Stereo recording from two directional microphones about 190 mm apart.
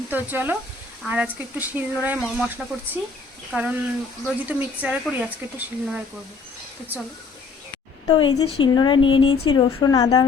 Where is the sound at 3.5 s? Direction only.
5° right (ahead or behind).